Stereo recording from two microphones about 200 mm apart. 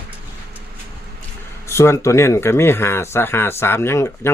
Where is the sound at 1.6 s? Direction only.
15° left (ahead or behind).